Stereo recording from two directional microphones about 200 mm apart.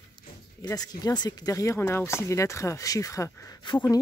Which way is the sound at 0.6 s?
20° left (ahead or behind).